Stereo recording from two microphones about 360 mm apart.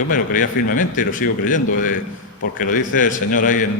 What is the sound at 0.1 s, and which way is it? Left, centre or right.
A man's voice, left.